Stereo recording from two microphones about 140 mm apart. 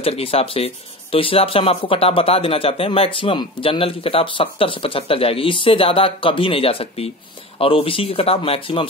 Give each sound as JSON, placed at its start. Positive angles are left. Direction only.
{"t": 0.0, "sound": "speech", "side_deg": 45}